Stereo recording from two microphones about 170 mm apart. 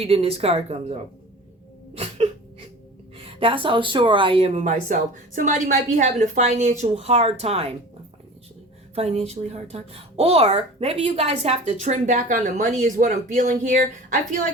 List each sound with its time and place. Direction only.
0.0 s a woman's voice: 35° right (ahead or behind)
2.0 s a sound: 35° right (ahead or behind)
3.2 s a woman's voice: 30° right (ahead or behind)
9.0 s a woman's voice: 40° right (ahead or behind)